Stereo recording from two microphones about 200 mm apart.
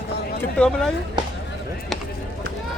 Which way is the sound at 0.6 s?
5° left (ahead or behind).